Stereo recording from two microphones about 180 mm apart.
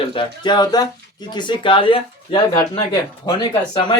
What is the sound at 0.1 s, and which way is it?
Speech, 25° left (ahead or behind).